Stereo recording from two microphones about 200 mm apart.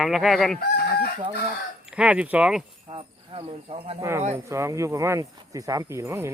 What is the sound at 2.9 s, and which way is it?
Speech, 30° right (ahead or behind).